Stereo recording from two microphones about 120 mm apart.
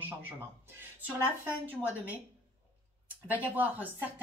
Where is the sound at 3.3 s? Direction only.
15° right (ahead or behind).